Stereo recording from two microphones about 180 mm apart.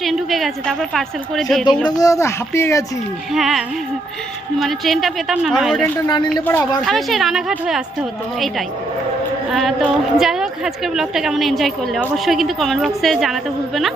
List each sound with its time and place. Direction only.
0.0 s a woman's voice: centre (ahead or behind)
1.8 s speech: 20° left (ahead or behind)
3.3 s a woman's voice: centre (ahead or behind)
4.6 s a woman's voice: centre (ahead or behind)
6.8 s a woman's voice: centre (ahead or behind)
9.5 s a woman's voice: centre (ahead or behind)